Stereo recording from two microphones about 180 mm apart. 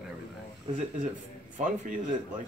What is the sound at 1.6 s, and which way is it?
Speech, 45° right (ahead or behind).